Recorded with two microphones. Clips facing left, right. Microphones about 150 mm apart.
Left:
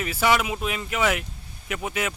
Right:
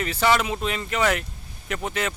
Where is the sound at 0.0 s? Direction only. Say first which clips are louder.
Right 1 dB; 5° left (ahead or behind).